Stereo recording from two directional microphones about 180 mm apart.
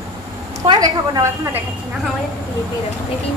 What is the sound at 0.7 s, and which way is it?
Speech, 20° right (ahead or behind).